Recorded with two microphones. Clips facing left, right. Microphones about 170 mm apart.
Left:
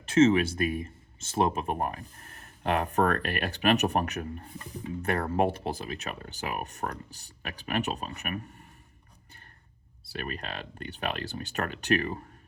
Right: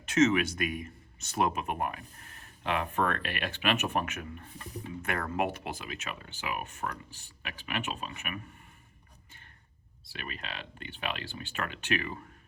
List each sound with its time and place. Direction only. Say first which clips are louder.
0.0 s speech: left 4 dB; 30° left (ahead or behind)
10.1 s speech: left 6 dB; 45° left (ahead or behind)